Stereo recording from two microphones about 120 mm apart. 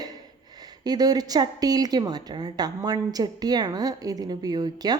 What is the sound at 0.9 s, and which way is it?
A woman's voice, 35° right (ahead or behind).